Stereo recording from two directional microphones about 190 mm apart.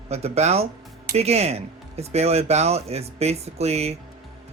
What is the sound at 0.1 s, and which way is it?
Speech, 35° right (ahead or behind).